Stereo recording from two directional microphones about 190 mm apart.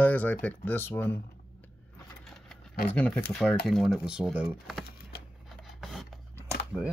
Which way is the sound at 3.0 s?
5° left (ahead or behind).